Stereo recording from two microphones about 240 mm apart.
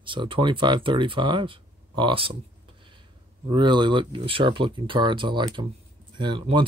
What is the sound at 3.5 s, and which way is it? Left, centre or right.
Speech, centre.